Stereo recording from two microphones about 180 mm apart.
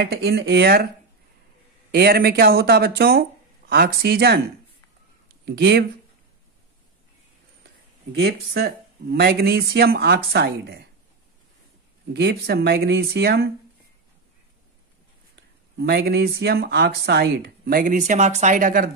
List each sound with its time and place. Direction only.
0.0 s speech: 65° right (ahead or behind)
1.9 s speech: 60° right (ahead or behind)
5.4 s speech: 65° right (ahead or behind)
8.1 s speech: 65° right (ahead or behind)
12.1 s speech: 65° right (ahead or behind)
15.8 s speech: 65° right (ahead or behind); by 18.9 s 50° right (ahead or behind)